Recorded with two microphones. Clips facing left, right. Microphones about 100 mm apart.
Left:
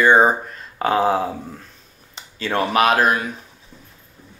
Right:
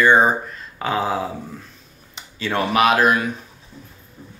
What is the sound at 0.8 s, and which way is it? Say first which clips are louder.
Speech: left 4 dB; 45° left (ahead or behind).